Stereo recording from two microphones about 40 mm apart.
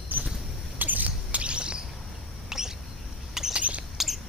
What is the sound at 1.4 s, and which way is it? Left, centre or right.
Bird, right.